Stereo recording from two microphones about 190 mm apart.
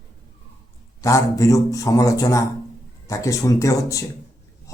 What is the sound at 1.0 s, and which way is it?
A man's voice, 15° left (ahead or behind).